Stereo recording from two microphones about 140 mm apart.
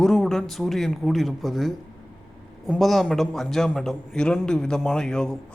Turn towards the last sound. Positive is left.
turn(degrees=5)  # may be behind; listen again after turning